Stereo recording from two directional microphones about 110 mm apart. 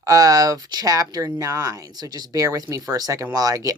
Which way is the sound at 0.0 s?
30° right (ahead or behind).